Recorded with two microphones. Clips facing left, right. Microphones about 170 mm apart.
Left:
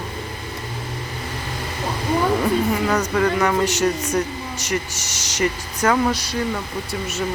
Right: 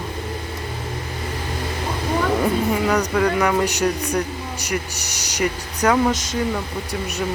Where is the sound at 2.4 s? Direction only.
Centre (ahead or behind).